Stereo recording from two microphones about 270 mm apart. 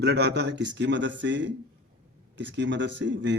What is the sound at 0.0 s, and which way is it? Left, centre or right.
Speech, right.